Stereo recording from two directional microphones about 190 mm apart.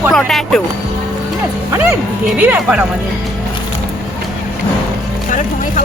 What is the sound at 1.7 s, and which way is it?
Speech, 15° right (ahead or behind).